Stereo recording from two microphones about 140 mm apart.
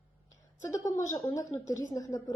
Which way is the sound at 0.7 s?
20° left (ahead or behind).